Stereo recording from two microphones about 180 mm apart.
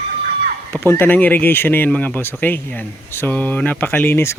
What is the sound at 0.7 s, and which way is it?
Speech, 10° left (ahead or behind).